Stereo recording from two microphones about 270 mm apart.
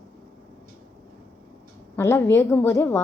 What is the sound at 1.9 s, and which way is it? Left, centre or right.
A woman's voice, centre.